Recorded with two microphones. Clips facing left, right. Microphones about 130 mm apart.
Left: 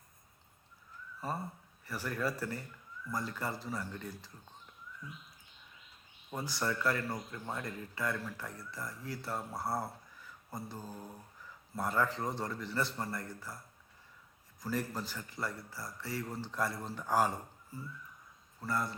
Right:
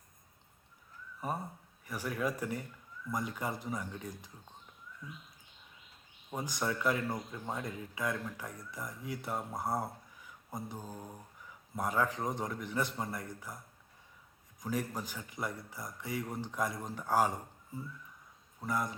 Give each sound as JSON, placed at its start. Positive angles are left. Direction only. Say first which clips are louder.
{"t": 1.9, "sound": "speech", "louder": "right 1 dB", "side_deg": -10}
{"t": 6.3, "sound": "speech", "louder": "even", "side_deg": -15}
{"t": 14.6, "sound": "speech", "louder": "even", "side_deg": -15}